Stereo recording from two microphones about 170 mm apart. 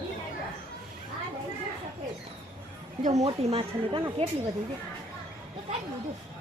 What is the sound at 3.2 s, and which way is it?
Speech, 35° right (ahead or behind).